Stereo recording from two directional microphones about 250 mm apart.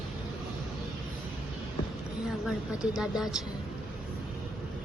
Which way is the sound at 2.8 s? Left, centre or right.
Centre.